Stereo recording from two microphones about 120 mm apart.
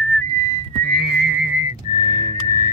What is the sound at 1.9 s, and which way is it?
Music, 80° right.